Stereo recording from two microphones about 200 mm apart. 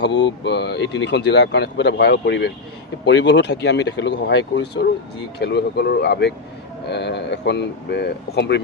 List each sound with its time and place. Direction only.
0.0 s speech: 60° left (ahead or behind)